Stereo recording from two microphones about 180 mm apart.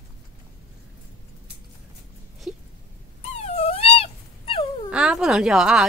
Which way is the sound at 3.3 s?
35° left (ahead or behind).